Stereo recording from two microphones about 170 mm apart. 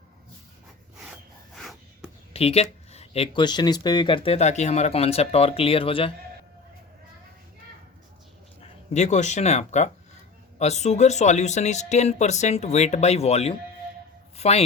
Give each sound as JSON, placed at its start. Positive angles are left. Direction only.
{"t": 0.9, "sound": "wood", "side_deg": -5}
{"t": 2.3, "sound": "speech", "side_deg": 35}
{"t": 8.6, "sound": "speech", "side_deg": 40}